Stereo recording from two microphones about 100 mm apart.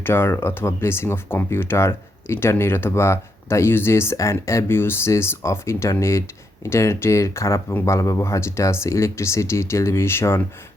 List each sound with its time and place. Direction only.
0.0 s speech: 25° left (ahead or behind)